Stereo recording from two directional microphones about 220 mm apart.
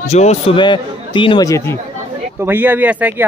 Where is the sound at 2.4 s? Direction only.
10° right (ahead or behind).